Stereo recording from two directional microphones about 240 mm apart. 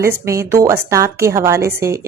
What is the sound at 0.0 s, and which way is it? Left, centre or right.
A woman's voice, centre.